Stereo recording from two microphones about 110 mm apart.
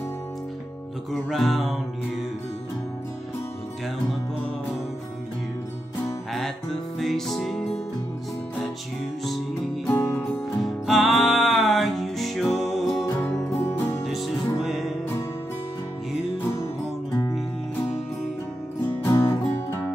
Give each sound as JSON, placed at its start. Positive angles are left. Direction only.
{"t": 1.3, "sound": "music", "side_deg": 0}
{"t": 6.3, "sound": "music", "side_deg": 5}
{"t": 9.8, "sound": "music", "side_deg": 20}
{"t": 10.6, "sound": "music", "side_deg": 0}
{"t": 13.2, "sound": "music", "side_deg": 20}
{"t": 14.0, "sound": "music", "side_deg": 0}
{"t": 17.1, "sound": "music", "side_deg": 35}
{"t": 19.0, "sound": "music", "side_deg": 25}